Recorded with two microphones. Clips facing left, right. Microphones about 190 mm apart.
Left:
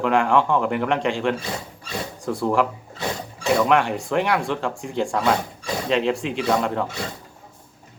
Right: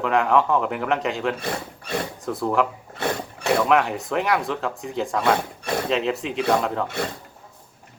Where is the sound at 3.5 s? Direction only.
Centre (ahead or behind).